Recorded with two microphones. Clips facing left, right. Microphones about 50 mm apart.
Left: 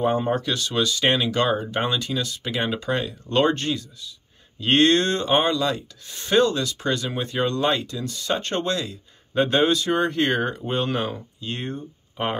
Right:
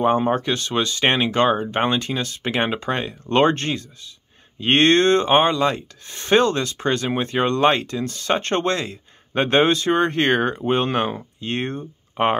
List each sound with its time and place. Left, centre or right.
0.0 s speech: right